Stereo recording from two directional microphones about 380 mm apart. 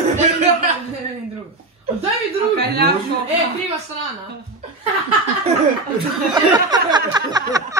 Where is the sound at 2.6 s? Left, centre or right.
Right.